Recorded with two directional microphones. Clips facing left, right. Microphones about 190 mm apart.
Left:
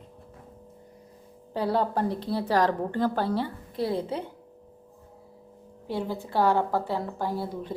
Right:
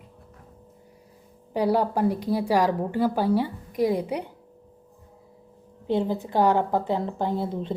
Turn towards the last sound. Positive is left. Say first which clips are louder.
# right 4 dB
turn(degrees=-20)  # may be behind; listen again after turning